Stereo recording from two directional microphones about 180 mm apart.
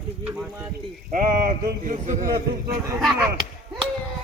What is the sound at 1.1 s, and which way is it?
Speech, 50° right (ahead or behind).